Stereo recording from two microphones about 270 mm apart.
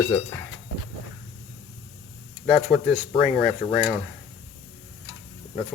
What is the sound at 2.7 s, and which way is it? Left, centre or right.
Speech, centre.